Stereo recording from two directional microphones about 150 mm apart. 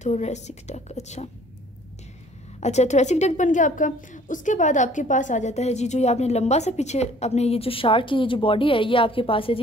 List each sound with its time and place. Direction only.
0.0 s a woman's voice: 50° left (ahead or behind)
2.6 s a woman's voice: 50° left (ahead or behind)